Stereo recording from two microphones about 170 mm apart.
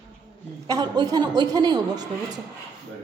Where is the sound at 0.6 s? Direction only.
25° right (ahead or behind).